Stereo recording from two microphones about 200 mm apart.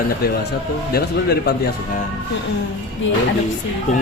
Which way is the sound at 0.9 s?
50° left (ahead or behind).